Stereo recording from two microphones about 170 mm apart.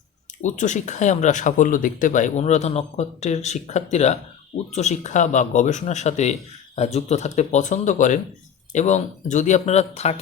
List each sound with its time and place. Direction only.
0.4 s speech: 45° left (ahead or behind)